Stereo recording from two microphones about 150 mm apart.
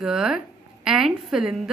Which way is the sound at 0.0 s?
5° right (ahead or behind).